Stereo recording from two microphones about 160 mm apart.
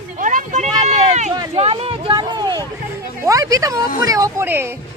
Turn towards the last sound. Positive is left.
turn(degrees=-15)  # may be behind; listen again after turning